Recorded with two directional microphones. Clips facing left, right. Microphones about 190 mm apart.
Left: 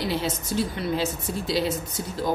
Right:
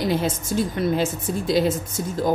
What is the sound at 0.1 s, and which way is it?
A woman's voice, 50° right (ahead or behind).